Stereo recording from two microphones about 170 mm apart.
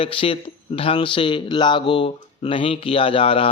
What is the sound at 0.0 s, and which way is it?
Speech, 30° left (ahead or behind).